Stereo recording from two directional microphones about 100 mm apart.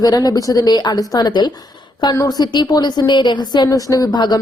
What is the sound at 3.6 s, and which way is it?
Speech, 35° left (ahead or behind).